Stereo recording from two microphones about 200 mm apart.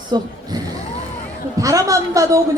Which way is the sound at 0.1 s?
20° right (ahead or behind).